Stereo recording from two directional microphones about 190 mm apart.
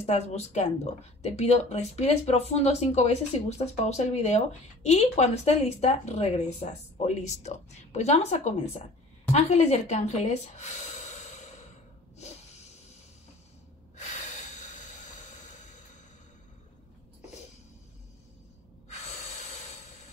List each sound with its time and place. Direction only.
0.0 s speech: 35° left (ahead or behind)